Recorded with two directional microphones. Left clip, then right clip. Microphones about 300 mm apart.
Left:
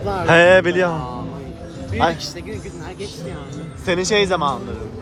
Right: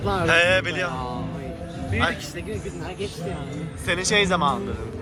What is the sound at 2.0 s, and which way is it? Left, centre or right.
Speech, left.